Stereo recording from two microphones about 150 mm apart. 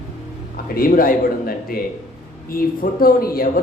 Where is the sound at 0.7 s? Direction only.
70° left (ahead or behind).